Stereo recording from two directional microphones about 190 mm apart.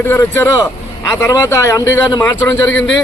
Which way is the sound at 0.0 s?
10° left (ahead or behind).